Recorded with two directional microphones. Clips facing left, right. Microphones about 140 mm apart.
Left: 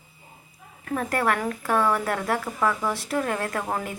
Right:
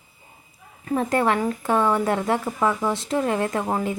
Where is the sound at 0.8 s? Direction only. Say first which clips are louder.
Right 4 dB; 20° right (ahead or behind).